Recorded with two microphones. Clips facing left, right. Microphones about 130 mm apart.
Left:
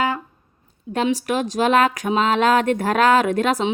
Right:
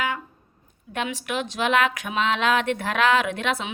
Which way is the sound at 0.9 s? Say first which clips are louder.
Left 7 dB; 35° left (ahead or behind).